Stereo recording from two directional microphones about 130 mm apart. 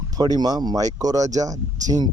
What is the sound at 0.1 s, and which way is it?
Speech, 30° right (ahead or behind).